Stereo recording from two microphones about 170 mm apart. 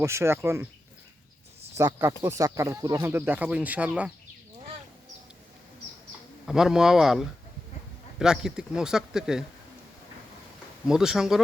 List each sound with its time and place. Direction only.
0.0 s speech: 15° right (ahead or behind)
1.8 s speech: 15° right (ahead or behind)
6.4 s speech: 5° right (ahead or behind)
10.8 s speech: 5° right (ahead or behind)